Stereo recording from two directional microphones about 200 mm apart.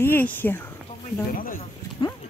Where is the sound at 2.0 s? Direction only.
20° left (ahead or behind).